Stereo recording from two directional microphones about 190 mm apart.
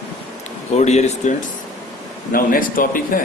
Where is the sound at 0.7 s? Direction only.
35° left (ahead or behind).